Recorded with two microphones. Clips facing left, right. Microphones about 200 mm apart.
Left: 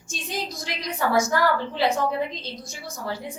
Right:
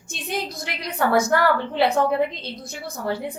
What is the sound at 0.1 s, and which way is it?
A woman's voice, 60° right (ahead or behind).